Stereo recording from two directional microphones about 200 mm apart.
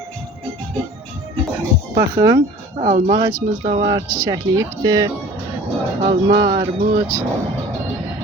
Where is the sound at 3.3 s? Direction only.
45° right (ahead or behind).